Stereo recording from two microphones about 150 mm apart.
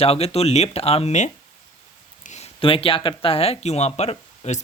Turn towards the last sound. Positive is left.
turn(degrees=50)  # may be behind; listen again after turning